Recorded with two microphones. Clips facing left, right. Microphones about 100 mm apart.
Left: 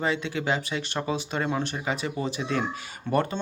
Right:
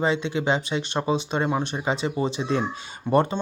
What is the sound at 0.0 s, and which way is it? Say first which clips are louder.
Speech: right 4 dB; 20° right (ahead or behind).